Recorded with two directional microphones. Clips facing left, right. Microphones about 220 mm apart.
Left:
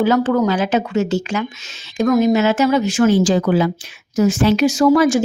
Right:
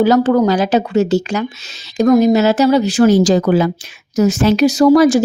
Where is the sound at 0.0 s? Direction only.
35° right (ahead or behind).